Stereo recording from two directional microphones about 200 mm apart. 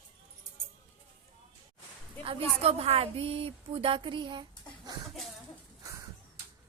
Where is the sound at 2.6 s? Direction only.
30° right (ahead or behind).